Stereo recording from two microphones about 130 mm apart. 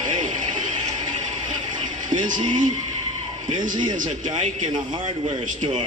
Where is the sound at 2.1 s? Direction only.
80° right.